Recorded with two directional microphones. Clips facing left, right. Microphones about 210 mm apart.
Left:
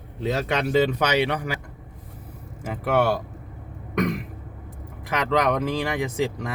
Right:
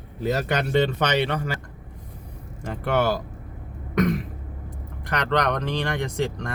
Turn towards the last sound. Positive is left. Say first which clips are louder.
# left 1 dB
turn(degrees=5)  # may be behind; listen again after turning